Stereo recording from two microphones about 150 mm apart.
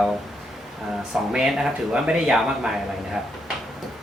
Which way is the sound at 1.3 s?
5° right (ahead or behind).